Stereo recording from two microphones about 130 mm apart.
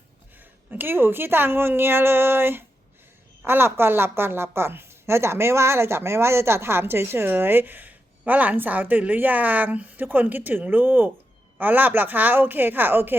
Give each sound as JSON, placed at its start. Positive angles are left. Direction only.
{"t": 0.7, "sound": "a woman's voice", "side_deg": -15}